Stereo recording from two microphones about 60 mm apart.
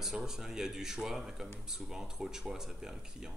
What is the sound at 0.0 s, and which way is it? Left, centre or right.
A man's voice, centre.